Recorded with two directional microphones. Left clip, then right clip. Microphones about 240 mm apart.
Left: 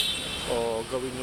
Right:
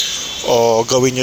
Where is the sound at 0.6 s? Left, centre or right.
Right.